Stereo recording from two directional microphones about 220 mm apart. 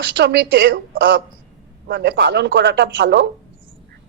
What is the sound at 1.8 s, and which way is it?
Speech, 55° right (ahead or behind).